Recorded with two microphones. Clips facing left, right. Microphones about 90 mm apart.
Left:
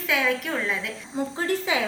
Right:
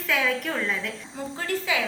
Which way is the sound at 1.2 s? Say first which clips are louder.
Left 4 dB; 20° left (ahead or behind).